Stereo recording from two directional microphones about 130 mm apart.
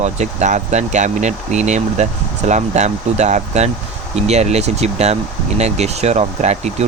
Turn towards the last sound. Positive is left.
turn(degrees=-60)  # may be behind; listen again after turning